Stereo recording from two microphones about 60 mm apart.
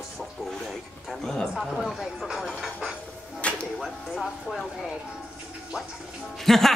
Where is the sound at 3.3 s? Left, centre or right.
Left.